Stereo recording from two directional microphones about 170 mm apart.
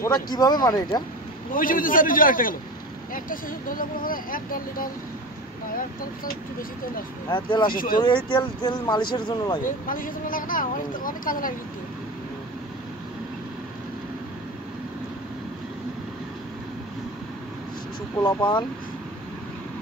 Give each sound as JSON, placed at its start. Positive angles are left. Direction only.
{"t": 0.0, "sound": "speech", "side_deg": 25}
{"t": 1.5, "sound": "a man's voice", "side_deg": 55}
{"t": 7.2, "sound": "speech", "side_deg": 30}
{"t": 7.7, "sound": "speech", "side_deg": 55}
{"t": 8.3, "sound": "speech", "side_deg": 25}
{"t": 9.8, "sound": "speech", "side_deg": 55}
{"t": 18.2, "sound": "speech", "side_deg": 30}